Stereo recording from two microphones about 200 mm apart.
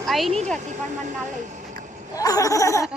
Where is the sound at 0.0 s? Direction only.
Centre (ahead or behind).